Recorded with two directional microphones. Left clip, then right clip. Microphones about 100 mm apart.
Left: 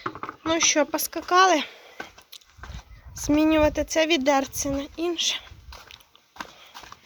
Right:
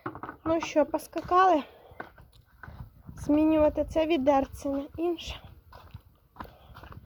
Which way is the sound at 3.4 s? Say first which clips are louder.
Left 3 dB; centre (ahead or behind).